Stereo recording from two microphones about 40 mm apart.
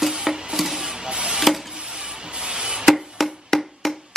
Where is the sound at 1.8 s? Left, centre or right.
Right.